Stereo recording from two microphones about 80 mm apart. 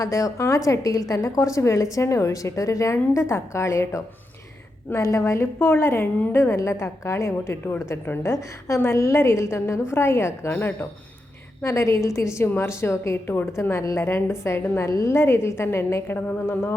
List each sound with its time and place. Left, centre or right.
0.0 s a woman's voice: left
11.6 s a woman's voice: left